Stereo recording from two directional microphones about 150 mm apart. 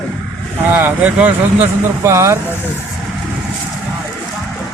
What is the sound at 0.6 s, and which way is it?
Speech, 10° right (ahead or behind).